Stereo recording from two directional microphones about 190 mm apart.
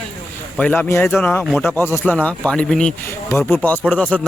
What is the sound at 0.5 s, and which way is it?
Speech, 5° left (ahead or behind).